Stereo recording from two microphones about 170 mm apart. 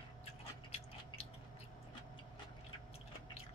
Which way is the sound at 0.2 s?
35° left (ahead or behind).